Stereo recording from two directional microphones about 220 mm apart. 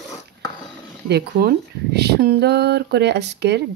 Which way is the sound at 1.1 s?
50° right (ahead or behind).